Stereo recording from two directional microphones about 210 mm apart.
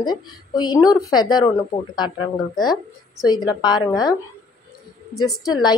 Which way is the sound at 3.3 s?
20° left (ahead or behind).